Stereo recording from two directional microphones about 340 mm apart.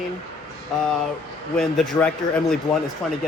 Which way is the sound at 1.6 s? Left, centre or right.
Centre.